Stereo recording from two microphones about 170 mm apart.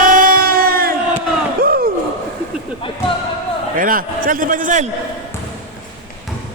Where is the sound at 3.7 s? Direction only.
55° right (ahead or behind).